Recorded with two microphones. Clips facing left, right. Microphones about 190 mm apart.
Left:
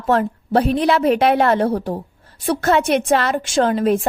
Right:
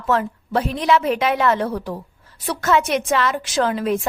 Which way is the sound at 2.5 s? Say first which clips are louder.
Left 3 dB; 55° left (ahead or behind).